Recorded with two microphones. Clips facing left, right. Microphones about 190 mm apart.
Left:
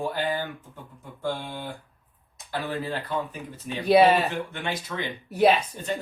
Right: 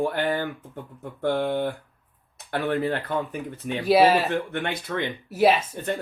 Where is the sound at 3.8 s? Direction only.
Centre (ahead or behind).